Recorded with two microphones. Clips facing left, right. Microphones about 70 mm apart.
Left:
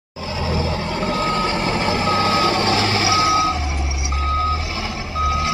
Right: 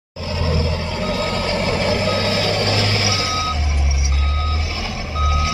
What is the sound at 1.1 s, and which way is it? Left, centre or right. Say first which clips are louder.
Vehicle: left 3 dB; left.